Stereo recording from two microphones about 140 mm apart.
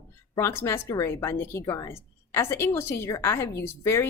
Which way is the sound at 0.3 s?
20° left (ahead or behind).